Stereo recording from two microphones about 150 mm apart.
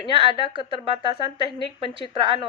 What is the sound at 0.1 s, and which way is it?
A woman's voice, 35° right (ahead or behind).